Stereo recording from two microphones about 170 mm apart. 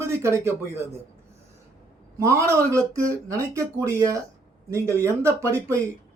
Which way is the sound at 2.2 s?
15° right (ahead or behind).